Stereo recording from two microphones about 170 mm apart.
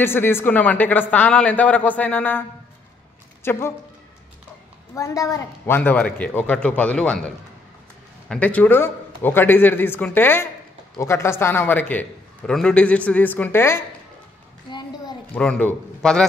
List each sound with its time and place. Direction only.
0.0 s a man's voice: 15° left (ahead or behind)
3.4 s a man's voice: 15° left (ahead or behind)
4.9 s a man's voice: 20° left (ahead or behind)
14.7 s a sound: 25° left (ahead or behind)
15.3 s a man's voice: 5° left (ahead or behind)